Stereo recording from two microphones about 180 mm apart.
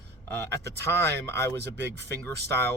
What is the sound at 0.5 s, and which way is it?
Speech, 15° left (ahead or behind).